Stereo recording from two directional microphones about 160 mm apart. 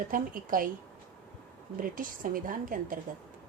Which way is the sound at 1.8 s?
60° right (ahead or behind).